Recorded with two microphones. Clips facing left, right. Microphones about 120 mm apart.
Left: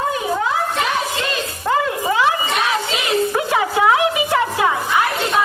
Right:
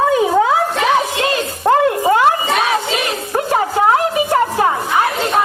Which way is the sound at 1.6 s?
50° right (ahead or behind).